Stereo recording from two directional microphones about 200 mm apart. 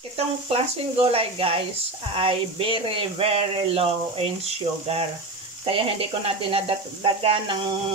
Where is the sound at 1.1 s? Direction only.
25° right (ahead or behind).